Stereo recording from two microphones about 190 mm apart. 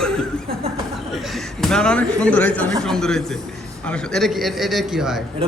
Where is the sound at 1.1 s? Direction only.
Centre (ahead or behind).